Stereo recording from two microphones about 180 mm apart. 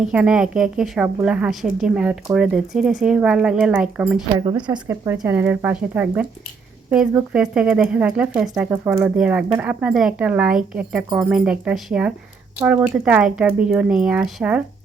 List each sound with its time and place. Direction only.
0.0 s a woman's voice: 5° right (ahead or behind)
4.4 s a woman's voice: 25° right (ahead or behind)
5.1 s a woman's voice: 10° right (ahead or behind)